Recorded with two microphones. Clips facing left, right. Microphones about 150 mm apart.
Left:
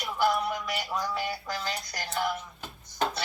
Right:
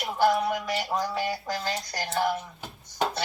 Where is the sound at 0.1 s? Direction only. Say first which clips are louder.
Right 3 dB; 35° right (ahead or behind).